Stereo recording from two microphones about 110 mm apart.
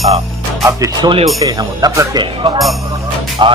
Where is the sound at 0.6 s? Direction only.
30° right (ahead or behind).